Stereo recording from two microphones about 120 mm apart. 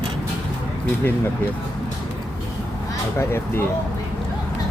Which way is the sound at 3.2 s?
20° left (ahead or behind).